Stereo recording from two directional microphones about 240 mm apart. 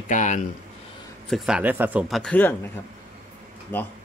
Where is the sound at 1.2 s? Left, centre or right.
Centre.